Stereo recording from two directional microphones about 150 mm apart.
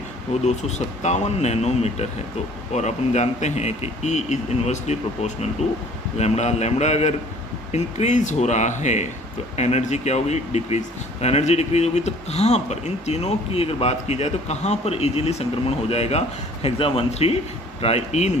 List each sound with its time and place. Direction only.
1.0 s speech: 50° left (ahead or behind)